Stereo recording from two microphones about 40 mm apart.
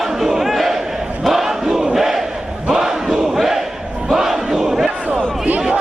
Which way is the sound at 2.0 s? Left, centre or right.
Centre.